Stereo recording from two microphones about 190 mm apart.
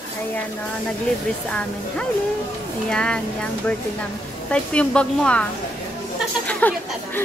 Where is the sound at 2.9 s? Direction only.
5° left (ahead or behind).